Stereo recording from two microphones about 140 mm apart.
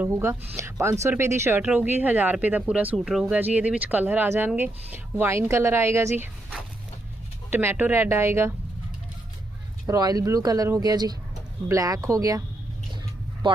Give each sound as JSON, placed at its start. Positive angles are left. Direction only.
{"t": 0.0, "sound": "speech", "side_deg": -20}
{"t": 7.5, "sound": "speech", "side_deg": -15}
{"t": 9.8, "sound": "speech", "side_deg": -25}
{"t": 13.4, "sound": "speech", "side_deg": -35}